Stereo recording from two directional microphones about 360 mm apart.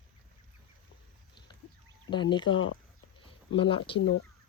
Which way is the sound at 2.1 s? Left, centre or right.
Centre.